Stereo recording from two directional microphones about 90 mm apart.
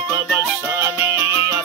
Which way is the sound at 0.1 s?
35° right (ahead or behind).